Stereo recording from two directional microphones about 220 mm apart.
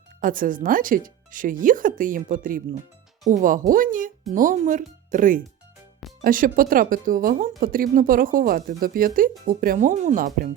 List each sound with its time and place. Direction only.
0.2 s speech: 40° right (ahead or behind)